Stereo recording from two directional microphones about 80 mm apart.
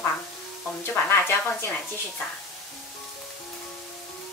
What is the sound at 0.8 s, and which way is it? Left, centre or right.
Speech, left.